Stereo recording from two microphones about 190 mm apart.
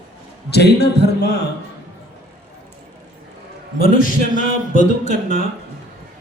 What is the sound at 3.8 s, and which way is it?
Speech, 45° left (ahead or behind).